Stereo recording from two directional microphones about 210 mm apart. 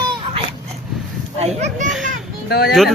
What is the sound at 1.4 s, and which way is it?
Speech, 30° right (ahead or behind).